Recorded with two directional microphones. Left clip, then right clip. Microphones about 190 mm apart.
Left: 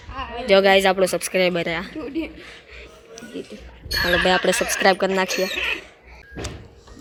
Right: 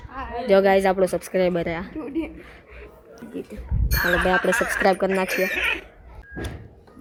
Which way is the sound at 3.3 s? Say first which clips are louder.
Right 1 dB; 5° right (ahead or behind).